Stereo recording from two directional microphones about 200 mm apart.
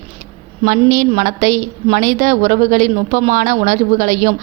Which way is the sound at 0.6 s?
40° right (ahead or behind).